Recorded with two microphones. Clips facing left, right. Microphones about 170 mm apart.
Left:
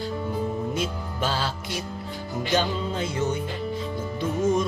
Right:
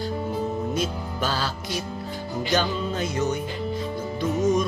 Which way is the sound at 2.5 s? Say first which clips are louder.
Even; 25° left (ahead or behind).